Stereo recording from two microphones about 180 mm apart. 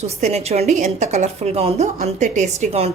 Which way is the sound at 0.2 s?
35° right (ahead or behind).